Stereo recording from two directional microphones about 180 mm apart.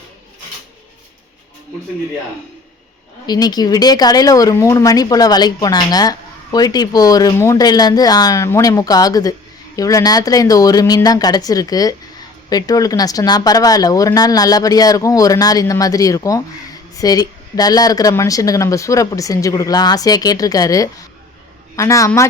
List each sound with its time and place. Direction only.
3.2 s speech: 20° left (ahead or behind)